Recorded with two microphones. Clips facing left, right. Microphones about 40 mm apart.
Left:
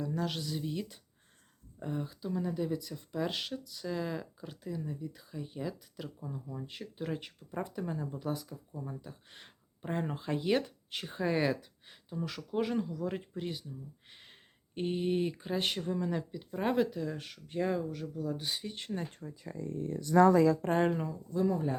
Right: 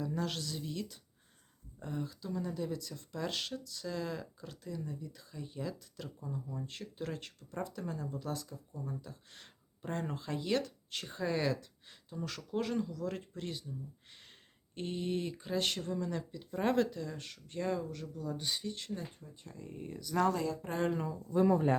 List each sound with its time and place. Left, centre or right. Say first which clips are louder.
0.0 s speech: left 2 dB; centre
18.7 s speech: left 1 dB; left
19.2 s speech: left 8 dB; left
20.6 s speech: left 8 dB; left
21.3 s speech: right 3 dB; right